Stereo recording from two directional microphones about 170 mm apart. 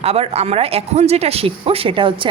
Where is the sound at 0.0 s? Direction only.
35° right (ahead or behind).